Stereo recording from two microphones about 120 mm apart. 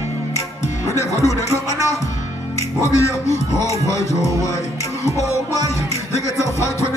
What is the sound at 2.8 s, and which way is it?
Music, 25° left (ahead or behind).